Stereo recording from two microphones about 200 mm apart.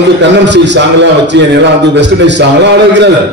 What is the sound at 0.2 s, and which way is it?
A man's voice, 60° right (ahead or behind).